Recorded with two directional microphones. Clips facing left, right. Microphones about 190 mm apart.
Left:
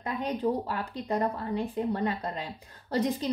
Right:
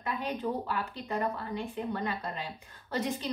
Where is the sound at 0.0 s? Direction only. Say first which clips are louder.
Left 4 dB; 35° left (ahead or behind).